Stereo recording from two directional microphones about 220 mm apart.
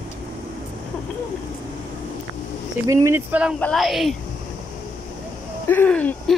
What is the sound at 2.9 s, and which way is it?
Speech, 10° right (ahead or behind).